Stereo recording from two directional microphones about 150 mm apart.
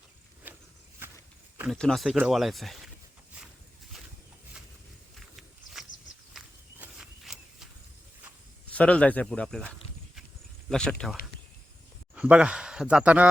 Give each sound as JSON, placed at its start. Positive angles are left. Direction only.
{"t": 0.4, "sound": "walk", "side_deg": -10}
{"t": 1.7, "sound": "speech", "side_deg": 5}
{"t": 5.1, "sound": "wild animals", "side_deg": 0}
{"t": 6.3, "sound": "walk", "side_deg": 0}
{"t": 8.7, "sound": "speech", "side_deg": 10}
{"t": 10.7, "sound": "speech", "side_deg": 5}
{"t": 12.1, "sound": "speech", "side_deg": -10}